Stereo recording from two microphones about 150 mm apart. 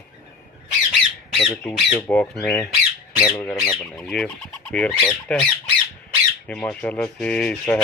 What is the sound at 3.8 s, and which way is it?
Fowl, centre (ahead or behind).